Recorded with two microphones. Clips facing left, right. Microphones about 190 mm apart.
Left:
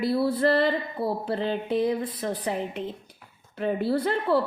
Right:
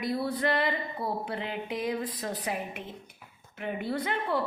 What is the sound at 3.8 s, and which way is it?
Speech, 70° left (ahead or behind).